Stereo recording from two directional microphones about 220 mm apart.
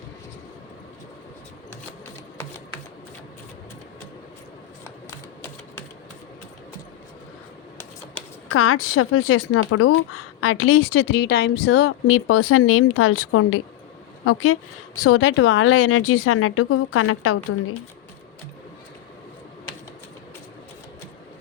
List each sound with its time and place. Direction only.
8.4 s a woman's voice: 70° left (ahead or behind); by 11.0 s 90° left
11.1 s a woman's voice: 50° left (ahead or behind); by 14.6 s 75° left (ahead or behind)
15.2 s a woman's voice: 60° left (ahead or behind); by 17.7 s 75° left (ahead or behind)